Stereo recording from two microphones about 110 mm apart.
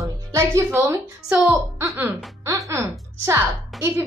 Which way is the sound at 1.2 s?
15° right (ahead or behind).